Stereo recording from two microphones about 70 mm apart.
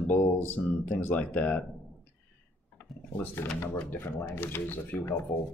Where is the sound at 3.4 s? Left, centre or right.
Left.